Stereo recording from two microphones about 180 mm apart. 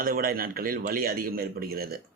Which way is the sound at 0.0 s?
55° right (ahead or behind).